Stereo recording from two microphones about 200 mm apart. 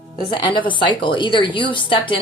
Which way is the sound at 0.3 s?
25° left (ahead or behind).